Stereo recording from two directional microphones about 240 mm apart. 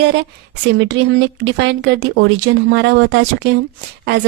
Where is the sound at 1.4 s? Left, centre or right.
Right.